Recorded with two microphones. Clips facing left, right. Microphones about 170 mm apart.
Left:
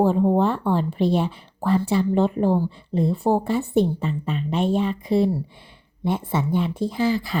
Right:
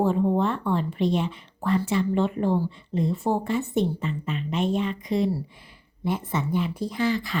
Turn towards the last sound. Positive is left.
turn(degrees=30)  # may be behind; listen again after turning